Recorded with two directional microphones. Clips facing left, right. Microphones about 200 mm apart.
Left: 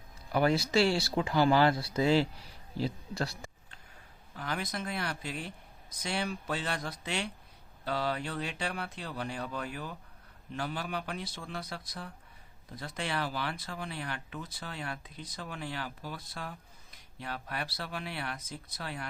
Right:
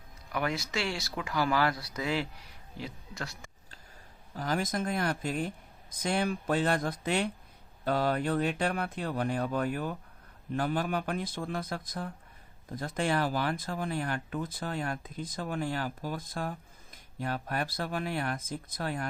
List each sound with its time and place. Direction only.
0.3 s speech: 30° left (ahead or behind)
4.4 s speech: 40° right (ahead or behind)